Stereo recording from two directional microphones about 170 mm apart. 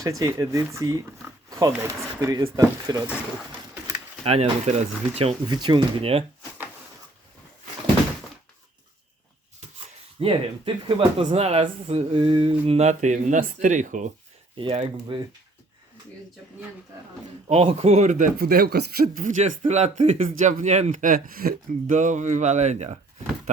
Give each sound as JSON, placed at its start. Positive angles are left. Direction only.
{"t": 0.0, "sound": "speech", "side_deg": -15}
{"t": 4.2, "sound": "speech", "side_deg": -35}
{"t": 10.2, "sound": "speech", "side_deg": -30}
{"t": 14.5, "sound": "speech", "side_deg": -30}
{"t": 17.5, "sound": "speech", "side_deg": -35}